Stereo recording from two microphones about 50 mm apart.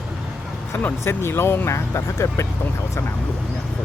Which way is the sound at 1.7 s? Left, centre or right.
Left.